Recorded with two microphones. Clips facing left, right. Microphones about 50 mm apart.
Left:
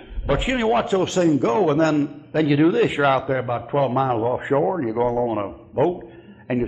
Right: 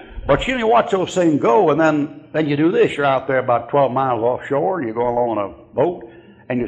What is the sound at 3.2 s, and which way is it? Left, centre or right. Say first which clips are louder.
Speech: right 6 dB; right.